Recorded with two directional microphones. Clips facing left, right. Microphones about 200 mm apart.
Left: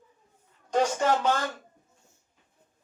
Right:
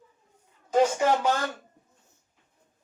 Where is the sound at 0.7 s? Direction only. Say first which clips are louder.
Right 2 dB; 10° right (ahead or behind).